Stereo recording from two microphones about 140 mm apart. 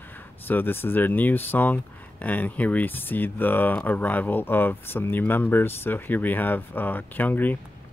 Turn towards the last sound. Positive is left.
turn(degrees=10)  # may be behind; listen again after turning